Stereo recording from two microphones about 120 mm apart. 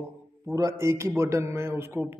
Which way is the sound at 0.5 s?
25° right (ahead or behind).